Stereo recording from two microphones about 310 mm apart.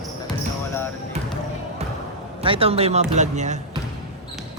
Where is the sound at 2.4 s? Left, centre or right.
Centre.